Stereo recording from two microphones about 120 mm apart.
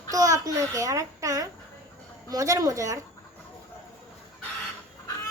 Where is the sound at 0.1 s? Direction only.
30° right (ahead or behind).